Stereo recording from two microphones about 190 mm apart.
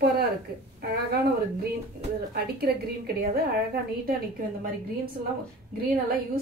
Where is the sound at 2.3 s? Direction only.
55° right (ahead or behind).